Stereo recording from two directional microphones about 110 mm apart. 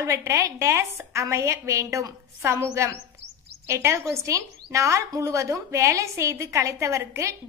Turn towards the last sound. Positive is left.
turn(degrees=-25)  # may be behind; listen again after turning